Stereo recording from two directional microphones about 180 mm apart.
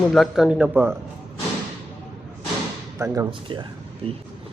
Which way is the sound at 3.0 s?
20° right (ahead or behind).